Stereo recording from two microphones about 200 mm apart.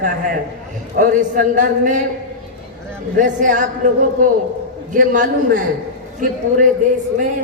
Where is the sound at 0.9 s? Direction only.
40° right (ahead or behind).